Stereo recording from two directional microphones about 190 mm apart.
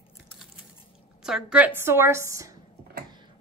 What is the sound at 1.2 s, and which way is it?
Speech, 5° right (ahead or behind).